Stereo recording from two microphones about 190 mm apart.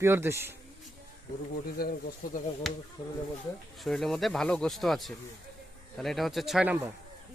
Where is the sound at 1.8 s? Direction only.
55° left (ahead or behind).